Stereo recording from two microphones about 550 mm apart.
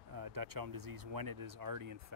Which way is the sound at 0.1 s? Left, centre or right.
Right.